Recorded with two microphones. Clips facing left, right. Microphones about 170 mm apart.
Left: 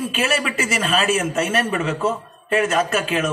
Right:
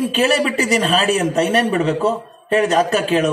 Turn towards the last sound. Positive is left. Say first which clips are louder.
# right 5 dB
turn(degrees=-35)  # may be behind; listen again after turning